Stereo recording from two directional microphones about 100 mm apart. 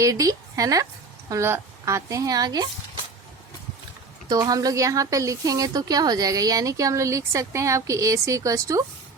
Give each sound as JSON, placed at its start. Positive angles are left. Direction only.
{"t": 0.0, "sound": "a woman's voice", "side_deg": -35}
{"t": 4.3, "sound": "a woman's voice", "side_deg": -40}